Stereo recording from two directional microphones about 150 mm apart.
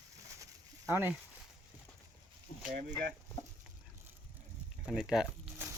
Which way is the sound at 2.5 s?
55° left (ahead or behind).